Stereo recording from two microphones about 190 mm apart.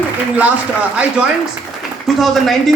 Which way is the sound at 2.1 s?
Centre (ahead or behind).